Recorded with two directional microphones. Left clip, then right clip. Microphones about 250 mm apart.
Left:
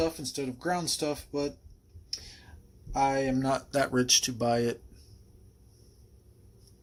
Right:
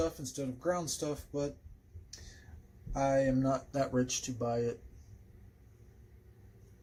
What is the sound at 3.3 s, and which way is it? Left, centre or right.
Speech, left.